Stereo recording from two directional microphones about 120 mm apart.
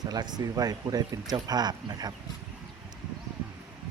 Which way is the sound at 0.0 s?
35° right (ahead or behind).